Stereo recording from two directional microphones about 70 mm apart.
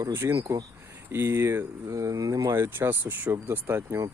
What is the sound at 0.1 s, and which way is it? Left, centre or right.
Speech, right.